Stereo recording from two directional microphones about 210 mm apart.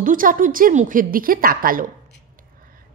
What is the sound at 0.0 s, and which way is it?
A woman's voice, 40° right (ahead or behind).